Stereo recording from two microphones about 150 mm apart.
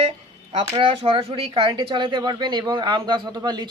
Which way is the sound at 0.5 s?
35° right (ahead or behind).